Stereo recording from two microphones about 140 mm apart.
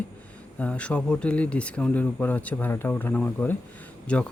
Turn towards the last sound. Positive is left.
turn(degrees=10)  # may be behind; listen again after turning